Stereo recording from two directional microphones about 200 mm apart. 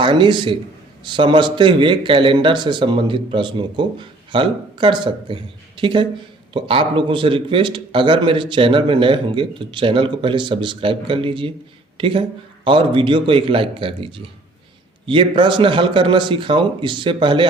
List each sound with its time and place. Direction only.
0.0 s speech: 25° right (ahead or behind)